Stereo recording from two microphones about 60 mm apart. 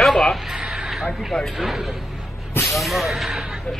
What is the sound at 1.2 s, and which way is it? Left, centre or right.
Speech, centre.